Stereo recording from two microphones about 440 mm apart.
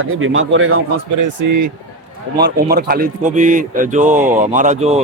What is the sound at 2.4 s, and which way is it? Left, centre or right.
A man's voice, right.